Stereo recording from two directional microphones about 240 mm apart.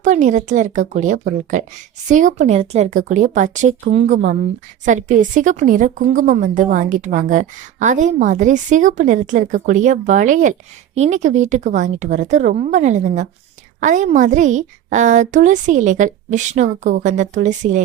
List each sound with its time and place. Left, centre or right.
0.0 s a woman's voice: right